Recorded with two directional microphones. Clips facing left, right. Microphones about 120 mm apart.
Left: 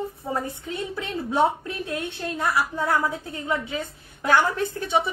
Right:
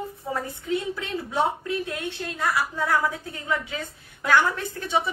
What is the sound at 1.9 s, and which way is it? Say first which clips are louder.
A woman's voice: left 2 dB; 25° left (ahead or behind).